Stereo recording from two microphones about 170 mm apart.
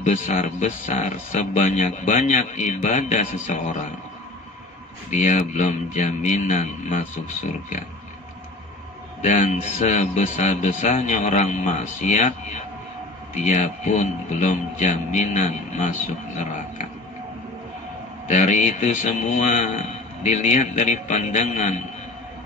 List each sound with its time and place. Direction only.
0.0 s speech: 45° left (ahead or behind)
5.1 s speech: 45° left (ahead or behind)
9.2 s speech: 45° left (ahead or behind)
13.4 s speech: 45° left (ahead or behind)
18.3 s speech: 45° left (ahead or behind)